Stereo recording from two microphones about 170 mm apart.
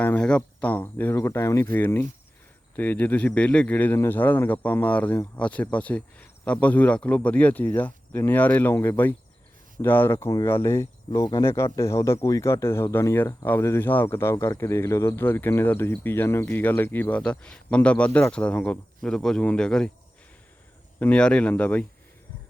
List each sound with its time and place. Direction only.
0.0 s speech: 10° left (ahead or behind)
11.2 s speech: 25° left (ahead or behind); by 19.9 s 5° left (ahead or behind)
21.0 s speech: 5° left (ahead or behind)